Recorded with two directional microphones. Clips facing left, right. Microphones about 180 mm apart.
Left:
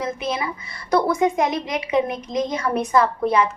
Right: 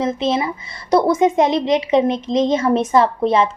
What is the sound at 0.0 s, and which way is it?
Speech, 25° right (ahead or behind).